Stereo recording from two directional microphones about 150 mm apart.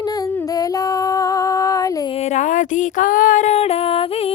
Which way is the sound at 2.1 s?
50° left (ahead or behind).